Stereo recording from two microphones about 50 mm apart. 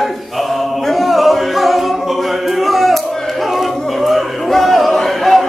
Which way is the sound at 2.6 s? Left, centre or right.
Centre.